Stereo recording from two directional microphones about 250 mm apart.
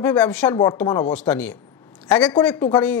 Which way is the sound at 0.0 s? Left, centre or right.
Centre.